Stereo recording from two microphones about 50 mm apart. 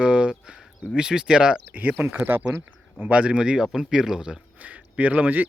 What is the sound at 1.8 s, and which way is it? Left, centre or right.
Speech, right.